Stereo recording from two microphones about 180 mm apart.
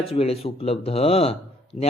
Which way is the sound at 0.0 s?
35° left (ahead or behind).